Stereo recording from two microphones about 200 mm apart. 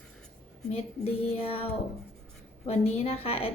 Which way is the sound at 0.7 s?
30° left (ahead or behind).